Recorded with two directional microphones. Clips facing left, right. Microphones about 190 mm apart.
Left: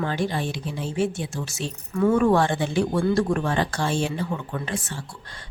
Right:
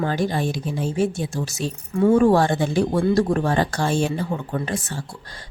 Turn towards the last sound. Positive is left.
turn(degrees=-40)  # may be behind; listen again after turning